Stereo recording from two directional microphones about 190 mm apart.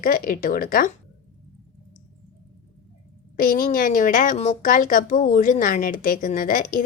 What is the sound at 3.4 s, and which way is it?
A woman's voice, 45° left (ahead or behind).